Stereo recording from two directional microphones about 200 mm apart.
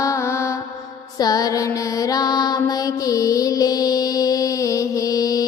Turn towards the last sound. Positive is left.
turn(degrees=20)  # may be behind; listen again after turning